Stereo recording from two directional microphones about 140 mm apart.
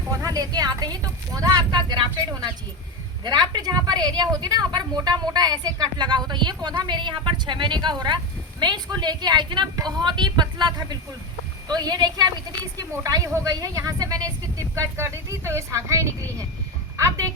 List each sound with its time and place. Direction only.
0.1 s a woman's voice: 25° right (ahead or behind)
3.2 s a woman's voice: 30° right (ahead or behind)